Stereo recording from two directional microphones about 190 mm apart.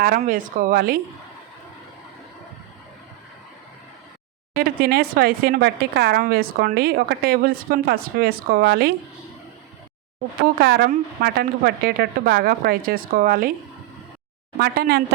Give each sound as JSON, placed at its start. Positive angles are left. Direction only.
{"t": 0.2, "sound": "speech", "side_deg": -45}
{"t": 4.5, "sound": "speech", "side_deg": -50}
{"t": 10.6, "sound": "speech", "side_deg": -55}
{"t": 14.6, "sound": "speech", "side_deg": -55}